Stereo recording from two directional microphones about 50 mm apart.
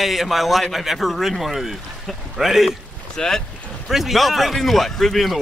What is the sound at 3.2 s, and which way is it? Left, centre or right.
Speech, centre.